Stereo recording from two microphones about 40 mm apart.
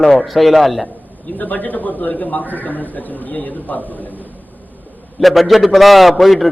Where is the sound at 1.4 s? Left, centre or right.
Left.